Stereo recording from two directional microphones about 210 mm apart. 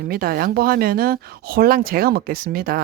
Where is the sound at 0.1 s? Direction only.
45° right (ahead or behind).